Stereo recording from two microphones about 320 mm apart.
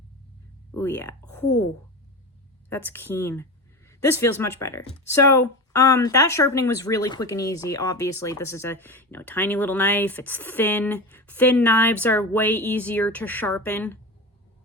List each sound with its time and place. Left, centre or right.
0.8 s speech: centre
2.6 s speech: centre